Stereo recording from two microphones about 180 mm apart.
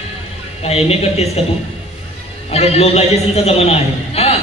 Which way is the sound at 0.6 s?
35° left (ahead or behind).